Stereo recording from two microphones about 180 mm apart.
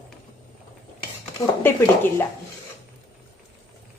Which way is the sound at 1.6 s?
10° left (ahead or behind).